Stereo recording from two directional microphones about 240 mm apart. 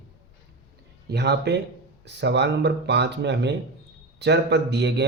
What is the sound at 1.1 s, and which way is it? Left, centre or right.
Speech, right.